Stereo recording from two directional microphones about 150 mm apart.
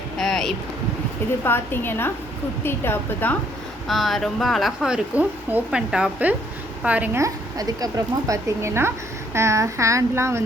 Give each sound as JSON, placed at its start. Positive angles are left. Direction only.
{"t": 0.2, "sound": "a sound", "side_deg": 5}
{"t": 1.5, "sound": "a woman's voice", "side_deg": 15}
{"t": 3.8, "sound": "speech", "side_deg": 0}